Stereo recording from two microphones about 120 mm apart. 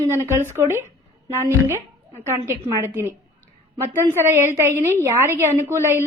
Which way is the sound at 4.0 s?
20° right (ahead or behind).